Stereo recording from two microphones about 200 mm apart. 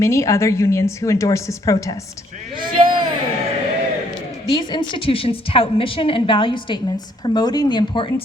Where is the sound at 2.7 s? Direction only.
25° right (ahead or behind).